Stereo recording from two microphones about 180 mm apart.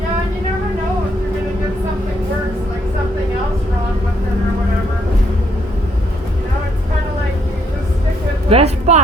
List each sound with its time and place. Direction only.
8.4 s a woman's voice: 35° right (ahead or behind)